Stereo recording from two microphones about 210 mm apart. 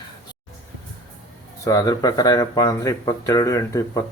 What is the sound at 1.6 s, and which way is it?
Speech, 15° left (ahead or behind).